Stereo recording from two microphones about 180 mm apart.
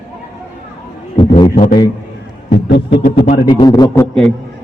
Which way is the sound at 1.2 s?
30° left (ahead or behind).